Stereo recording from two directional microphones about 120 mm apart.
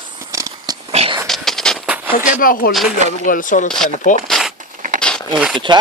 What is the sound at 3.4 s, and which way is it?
Speech, 90° left.